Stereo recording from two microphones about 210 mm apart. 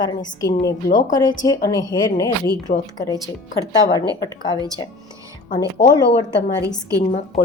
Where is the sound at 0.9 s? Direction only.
40° left (ahead or behind).